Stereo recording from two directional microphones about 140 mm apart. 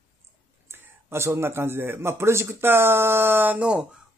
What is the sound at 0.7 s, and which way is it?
A man's voice, 20° right (ahead or behind).